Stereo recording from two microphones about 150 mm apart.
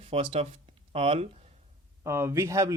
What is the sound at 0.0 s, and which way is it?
Speech, 40° right (ahead or behind).